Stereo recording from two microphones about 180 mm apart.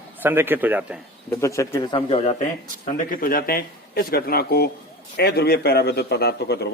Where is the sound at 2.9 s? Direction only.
50° left (ahead or behind).